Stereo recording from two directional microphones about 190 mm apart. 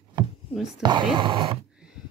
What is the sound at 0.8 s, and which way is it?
Speech, 25° right (ahead or behind).